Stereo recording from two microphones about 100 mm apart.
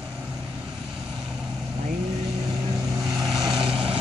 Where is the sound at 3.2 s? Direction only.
50° right (ahead or behind).